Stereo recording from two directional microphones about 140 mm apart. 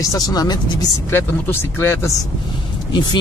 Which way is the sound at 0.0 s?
25° left (ahead or behind).